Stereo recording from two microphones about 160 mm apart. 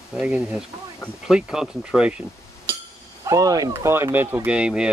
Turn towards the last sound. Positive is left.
turn(degrees=-5)  # may be behind; listen again after turning